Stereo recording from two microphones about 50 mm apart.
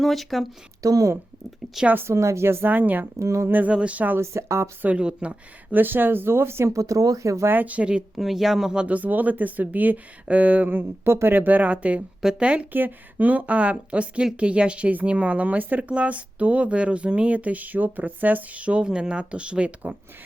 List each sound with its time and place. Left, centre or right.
0.0 s speech: centre
2.0 s a woman's voice: right
2.6 s speech: right
3.2 s speech: right
3.5 s speech: right
4.2 s speech: right
4.9 s speech: right
5.7 s speech: right
7.4 s speech: right
8.1 s speech: centre
8.9 s speech: right
11.0 s a woman's voice: right
11.3 s speech: right
12.7 s speech: right